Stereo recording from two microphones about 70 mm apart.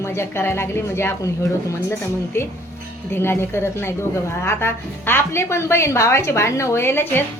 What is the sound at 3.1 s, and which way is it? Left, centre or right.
Speech, left.